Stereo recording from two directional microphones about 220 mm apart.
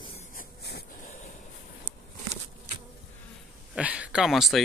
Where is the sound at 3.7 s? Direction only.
5° right (ahead or behind).